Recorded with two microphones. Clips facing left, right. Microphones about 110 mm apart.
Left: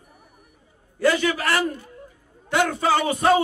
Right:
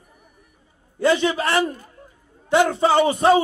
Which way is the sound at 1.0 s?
25° right (ahead or behind).